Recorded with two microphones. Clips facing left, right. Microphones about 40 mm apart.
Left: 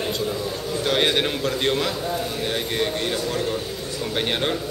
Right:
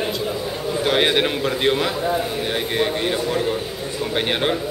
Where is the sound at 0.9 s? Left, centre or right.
Centre.